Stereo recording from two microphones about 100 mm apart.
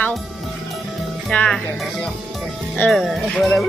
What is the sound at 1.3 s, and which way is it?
Speech, 15° left (ahead or behind).